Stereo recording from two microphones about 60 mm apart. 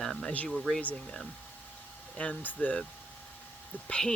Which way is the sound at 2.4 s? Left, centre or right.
Left.